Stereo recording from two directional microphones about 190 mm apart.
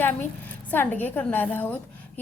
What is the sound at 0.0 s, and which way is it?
A woman's voice, 10° left (ahead or behind).